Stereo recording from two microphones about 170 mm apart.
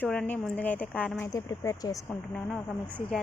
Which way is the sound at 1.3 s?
20° left (ahead or behind).